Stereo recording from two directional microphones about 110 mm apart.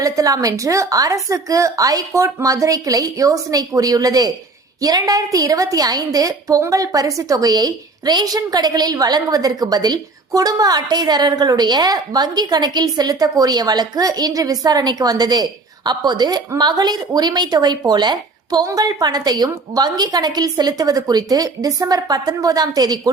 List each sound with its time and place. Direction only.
0.0 s a woman's voice: 30° right (ahead or behind)